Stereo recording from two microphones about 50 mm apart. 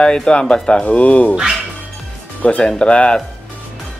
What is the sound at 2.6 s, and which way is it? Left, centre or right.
Speech, left.